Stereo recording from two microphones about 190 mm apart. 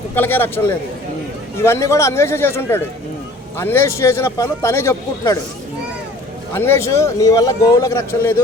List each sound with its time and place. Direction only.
0.1 s speech: 10° left (ahead or behind)
1.6 s speech: 15° left (ahead or behind)
6.5 s speech: 10° left (ahead or behind)